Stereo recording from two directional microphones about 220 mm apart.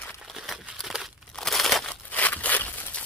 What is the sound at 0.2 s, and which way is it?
Crumpling, centre (ahead or behind).